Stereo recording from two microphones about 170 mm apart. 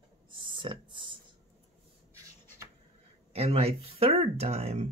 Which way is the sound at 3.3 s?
35° right (ahead or behind).